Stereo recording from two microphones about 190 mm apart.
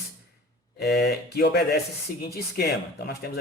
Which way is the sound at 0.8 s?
55° left (ahead or behind).